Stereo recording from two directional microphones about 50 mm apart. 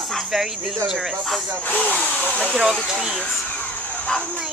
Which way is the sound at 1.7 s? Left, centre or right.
Left.